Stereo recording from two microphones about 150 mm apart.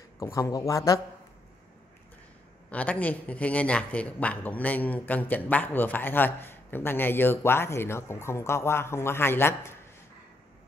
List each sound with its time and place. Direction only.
0.2 s speech: 20° left (ahead or behind)
2.7 s speech: 10° left (ahead or behind)